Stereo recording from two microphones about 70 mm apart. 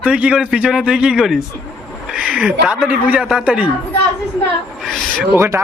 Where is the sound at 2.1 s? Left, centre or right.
Centre.